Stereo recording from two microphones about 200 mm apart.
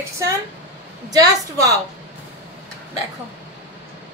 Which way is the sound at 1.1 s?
15° right (ahead or behind).